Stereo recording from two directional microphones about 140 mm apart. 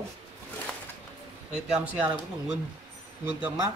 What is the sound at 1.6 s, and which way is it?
Speech, 10° right (ahead or behind).